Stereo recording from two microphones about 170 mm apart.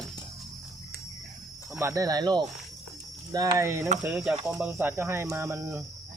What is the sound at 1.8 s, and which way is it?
Speech, 20° right (ahead or behind).